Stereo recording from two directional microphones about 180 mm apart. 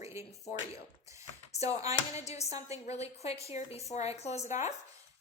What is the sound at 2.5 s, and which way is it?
Speech, 40° left (ahead or behind).